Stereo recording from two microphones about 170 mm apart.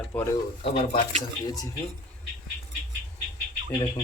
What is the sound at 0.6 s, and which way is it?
Speech, 35° left (ahead or behind).